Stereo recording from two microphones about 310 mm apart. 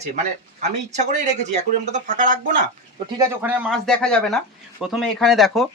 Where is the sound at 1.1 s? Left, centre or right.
Right.